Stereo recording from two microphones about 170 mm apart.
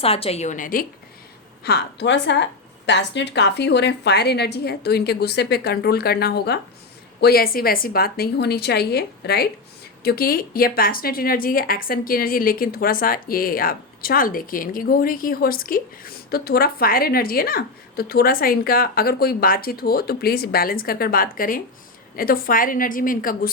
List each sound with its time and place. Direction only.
0.0 s a woman's voice: 35° left (ahead or behind); by 0.9 s 55° left (ahead or behind)
1.6 s a woman's voice: 80° left; by 23.5 s 55° left (ahead or behind)